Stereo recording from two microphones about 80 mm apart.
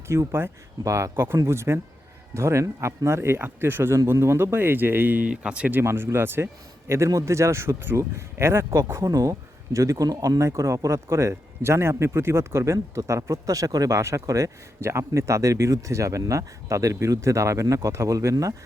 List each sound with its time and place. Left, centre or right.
0.1 s speech: right; by 5.7 s centre
5.7 s speech: right
9.0 s speech: right